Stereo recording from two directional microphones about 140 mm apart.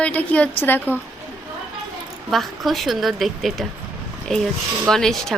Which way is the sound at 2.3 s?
Centre (ahead or behind).